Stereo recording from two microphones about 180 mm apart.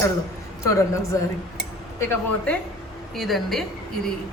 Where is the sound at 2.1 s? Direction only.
5° left (ahead or behind).